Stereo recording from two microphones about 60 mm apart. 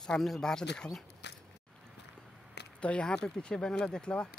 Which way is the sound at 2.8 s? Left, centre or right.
Centre.